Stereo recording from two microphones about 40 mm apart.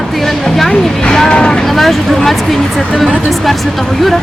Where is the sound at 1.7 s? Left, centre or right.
Centre.